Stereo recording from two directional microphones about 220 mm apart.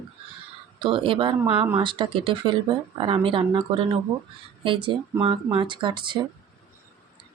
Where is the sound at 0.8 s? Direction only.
25° right (ahead or behind).